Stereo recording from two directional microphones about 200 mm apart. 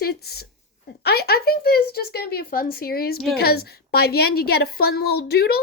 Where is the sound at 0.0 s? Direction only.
50° left (ahead or behind).